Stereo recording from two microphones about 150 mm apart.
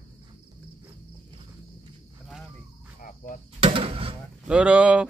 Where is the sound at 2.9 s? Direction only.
65° left (ahead or behind).